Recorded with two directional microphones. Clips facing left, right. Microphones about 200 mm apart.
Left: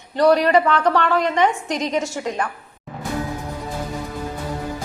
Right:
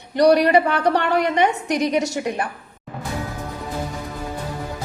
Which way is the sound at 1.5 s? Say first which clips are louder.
Right 3 dB; 65° right (ahead or behind).